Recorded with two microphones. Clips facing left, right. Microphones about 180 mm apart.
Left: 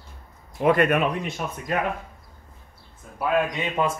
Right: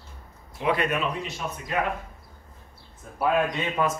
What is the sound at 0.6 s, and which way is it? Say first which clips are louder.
Speech: left 6 dB; 50° left (ahead or behind).